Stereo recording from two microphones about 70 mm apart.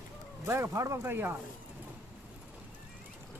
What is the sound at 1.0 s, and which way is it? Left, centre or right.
Speech, right.